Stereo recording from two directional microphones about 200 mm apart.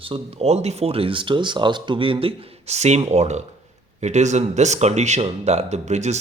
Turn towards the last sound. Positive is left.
turn(degrees=-35)  # may be behind; listen again after turning